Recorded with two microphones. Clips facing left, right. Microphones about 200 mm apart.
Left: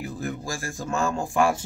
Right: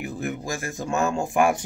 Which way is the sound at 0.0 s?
20° right (ahead or behind).